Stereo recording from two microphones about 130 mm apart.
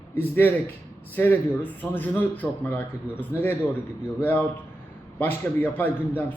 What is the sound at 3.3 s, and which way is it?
Speech, 25° left (ahead or behind).